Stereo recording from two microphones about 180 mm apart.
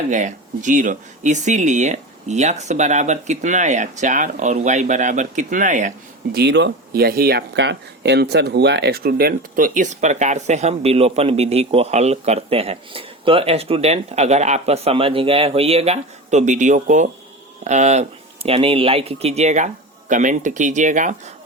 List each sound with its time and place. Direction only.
0.1 s speech: 45° right (ahead or behind)
6.3 s speech: 70° right (ahead or behind); by 21.3 s 45° right (ahead or behind)